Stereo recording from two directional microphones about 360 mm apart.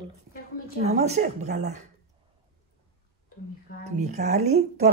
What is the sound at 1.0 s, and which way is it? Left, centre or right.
Speech, centre.